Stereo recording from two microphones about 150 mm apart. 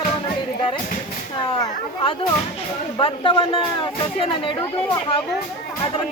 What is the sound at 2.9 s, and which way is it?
Speech, 35° left (ahead or behind).